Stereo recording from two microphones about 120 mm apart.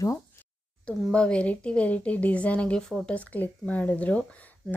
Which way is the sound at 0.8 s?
10° left (ahead or behind).